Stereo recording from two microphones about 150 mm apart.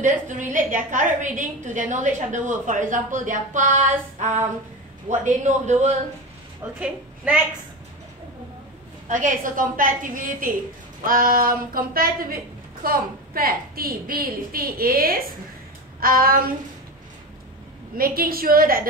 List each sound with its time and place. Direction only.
0.0 s a woman's voice: 60° right (ahead or behind)
6.6 s a woman's voice: 15° right (ahead or behind)
9.1 s a woman's voice: 60° right (ahead or behind)
17.9 s a woman's voice: 75° right (ahead or behind)